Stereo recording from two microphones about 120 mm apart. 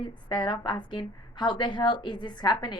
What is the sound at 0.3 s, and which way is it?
A woman's voice, 40° left (ahead or behind).